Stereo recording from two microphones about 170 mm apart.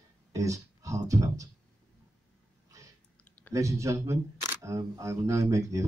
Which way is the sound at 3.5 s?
20° right (ahead or behind).